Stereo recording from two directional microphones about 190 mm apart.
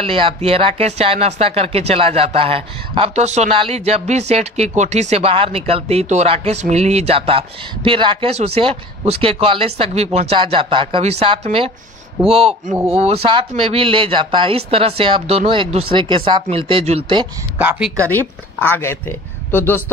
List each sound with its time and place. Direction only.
0.0 s speech: 30° right (ahead or behind)
17.6 s speech: 5° right (ahead or behind)
18.1 s speech: 10° left (ahead or behind)